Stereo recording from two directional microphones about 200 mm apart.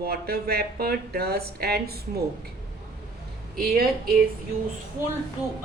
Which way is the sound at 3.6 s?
50° right (ahead or behind).